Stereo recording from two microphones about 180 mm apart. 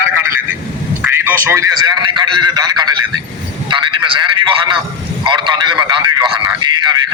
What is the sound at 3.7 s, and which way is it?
A man's voice, 25° right (ahead or behind).